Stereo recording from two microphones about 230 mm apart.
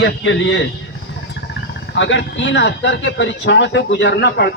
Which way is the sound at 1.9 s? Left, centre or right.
Left.